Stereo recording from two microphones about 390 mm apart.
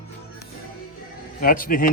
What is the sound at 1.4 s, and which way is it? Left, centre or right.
Speech, left.